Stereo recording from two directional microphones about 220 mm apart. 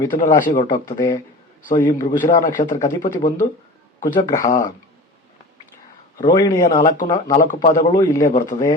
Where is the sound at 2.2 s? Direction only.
35° left (ahead or behind).